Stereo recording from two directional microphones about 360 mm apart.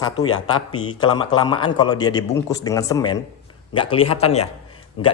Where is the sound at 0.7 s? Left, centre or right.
Centre.